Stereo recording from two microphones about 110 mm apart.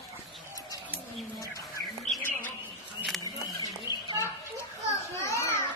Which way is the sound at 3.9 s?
35° left (ahead or behind).